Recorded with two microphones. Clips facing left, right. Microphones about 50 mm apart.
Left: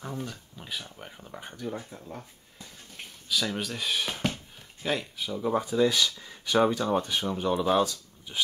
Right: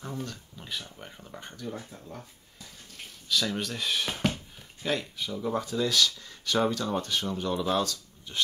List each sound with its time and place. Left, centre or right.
0.0 s speech: centre